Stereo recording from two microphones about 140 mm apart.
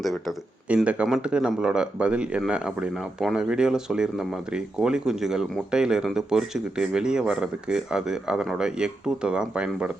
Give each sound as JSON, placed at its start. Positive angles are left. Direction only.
{"t": 0.0, "sound": "speech", "side_deg": 0}